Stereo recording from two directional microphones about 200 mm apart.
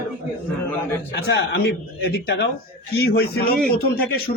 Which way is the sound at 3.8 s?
50° left (ahead or behind).